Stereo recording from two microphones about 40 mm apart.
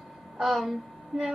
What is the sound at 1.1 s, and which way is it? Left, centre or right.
Music, centre.